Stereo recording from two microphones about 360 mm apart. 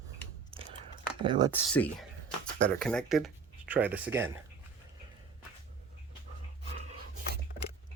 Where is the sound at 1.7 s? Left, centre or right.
Centre.